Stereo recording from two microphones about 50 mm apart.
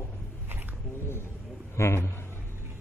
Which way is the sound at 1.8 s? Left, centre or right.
Left.